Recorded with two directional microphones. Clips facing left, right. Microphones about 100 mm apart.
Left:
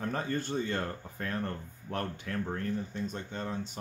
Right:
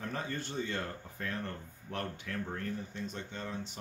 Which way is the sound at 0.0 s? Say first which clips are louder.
Left 5 dB; 45° left (ahead or behind).